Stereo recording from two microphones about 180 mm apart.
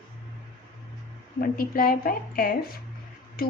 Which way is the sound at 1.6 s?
55° left (ahead or behind).